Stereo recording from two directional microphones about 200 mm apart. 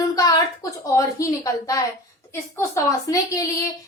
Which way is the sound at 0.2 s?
15° left (ahead or behind).